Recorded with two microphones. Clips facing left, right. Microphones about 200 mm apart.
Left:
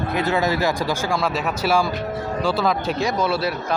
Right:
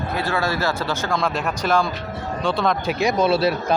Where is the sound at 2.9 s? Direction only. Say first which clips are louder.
Right 3 dB; 15° right (ahead or behind).